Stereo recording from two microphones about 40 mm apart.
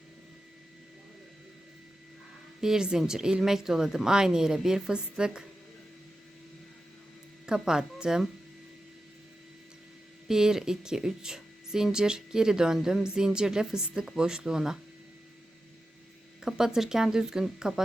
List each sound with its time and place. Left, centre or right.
2.6 s speech: centre
7.4 s speech: centre
10.2 s speech: centre
16.4 s speech: centre